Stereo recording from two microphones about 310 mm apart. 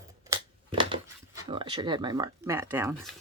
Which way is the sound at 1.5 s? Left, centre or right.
Centre.